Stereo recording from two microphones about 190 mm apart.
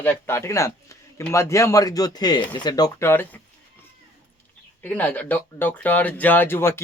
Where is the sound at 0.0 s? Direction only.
10° left (ahead or behind).